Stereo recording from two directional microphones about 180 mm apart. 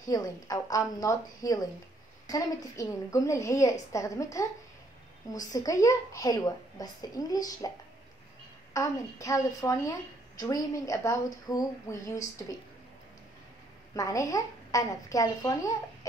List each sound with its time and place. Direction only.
0.0 s a woman's voice: 20° left (ahead or behind)
5.5 s a woman's voice: 20° left (ahead or behind)
8.7 s a woman's voice: 15° left (ahead or behind)
13.9 s a woman's voice: 20° left (ahead or behind)